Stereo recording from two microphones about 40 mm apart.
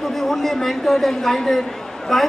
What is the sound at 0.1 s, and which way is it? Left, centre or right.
A man's voice, centre.